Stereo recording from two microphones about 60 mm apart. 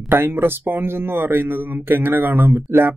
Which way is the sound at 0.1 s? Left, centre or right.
Right.